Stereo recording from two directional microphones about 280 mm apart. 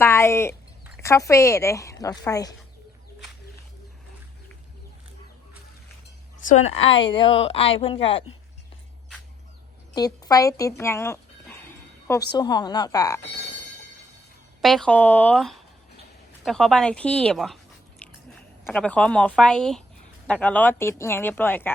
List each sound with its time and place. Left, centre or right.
0.0 s speech: centre
6.4 s a woman's voice: left
9.9 s a woman's voice: centre
14.6 s speech: centre